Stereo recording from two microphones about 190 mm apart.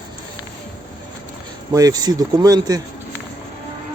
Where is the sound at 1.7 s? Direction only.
20° right (ahead or behind).